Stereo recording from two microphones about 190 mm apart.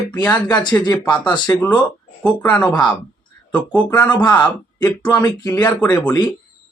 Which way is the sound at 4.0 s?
10° left (ahead or behind).